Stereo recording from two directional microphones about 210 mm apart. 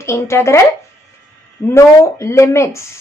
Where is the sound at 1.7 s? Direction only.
15° left (ahead or behind).